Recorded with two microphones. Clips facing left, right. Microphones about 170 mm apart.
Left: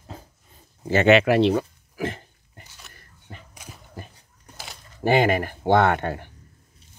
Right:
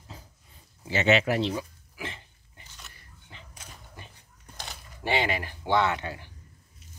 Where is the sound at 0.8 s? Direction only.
55° left (ahead or behind).